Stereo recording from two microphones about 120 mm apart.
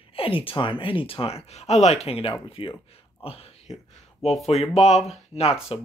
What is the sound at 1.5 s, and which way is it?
Speech, 65° left (ahead or behind).